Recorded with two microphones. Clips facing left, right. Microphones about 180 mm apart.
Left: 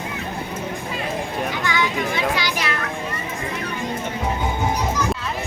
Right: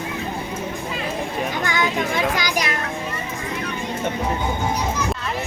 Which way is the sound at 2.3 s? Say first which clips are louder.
Right 1 dB; 45° right (ahead or behind).